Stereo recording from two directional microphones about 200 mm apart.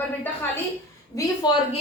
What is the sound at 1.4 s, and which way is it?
Speech, 20° left (ahead or behind).